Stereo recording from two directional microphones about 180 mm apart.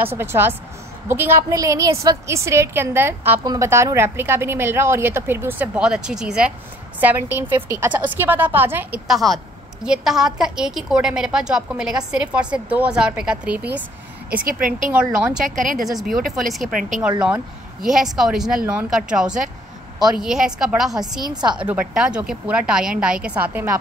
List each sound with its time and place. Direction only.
0.0 s a woman's voice: 15° right (ahead or behind)
14.5 s speech: 50° right (ahead or behind)
14.9 s a woman's voice: 5° right (ahead or behind)
17.8 s a woman's voice: centre (ahead or behind)